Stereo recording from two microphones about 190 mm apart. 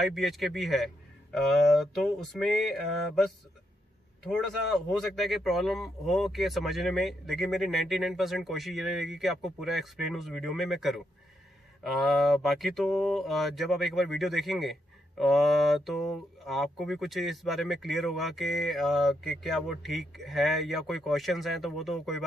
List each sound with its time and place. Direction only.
0.0 s speech: centre (ahead or behind)
4.3 s speech: centre (ahead or behind)